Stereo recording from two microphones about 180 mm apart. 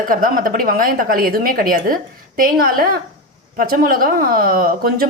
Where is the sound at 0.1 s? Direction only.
50° right (ahead or behind).